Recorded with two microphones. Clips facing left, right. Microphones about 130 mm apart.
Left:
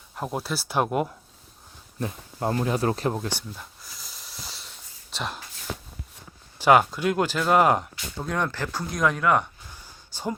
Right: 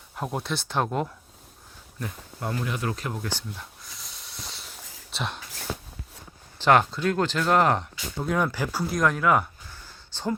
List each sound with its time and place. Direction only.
0.2 s speech: centre (ahead or behind)
2.0 s speech: 25° left (ahead or behind)
3.8 s a sound: centre (ahead or behind)
5.1 s speech: centre (ahead or behind)
6.6 s speech: 10° left (ahead or behind)
8.2 s speech: 5° right (ahead or behind)
10.1 s speech: 10° left (ahead or behind)